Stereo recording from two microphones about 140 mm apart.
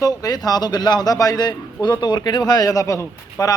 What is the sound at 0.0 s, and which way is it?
A man's voice, 25° left (ahead or behind).